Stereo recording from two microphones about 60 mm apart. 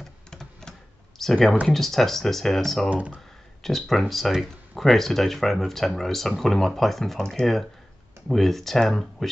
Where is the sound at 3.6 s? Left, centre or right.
Centre.